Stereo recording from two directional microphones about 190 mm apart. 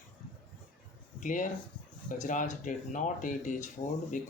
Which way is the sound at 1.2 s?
40° left (ahead or behind).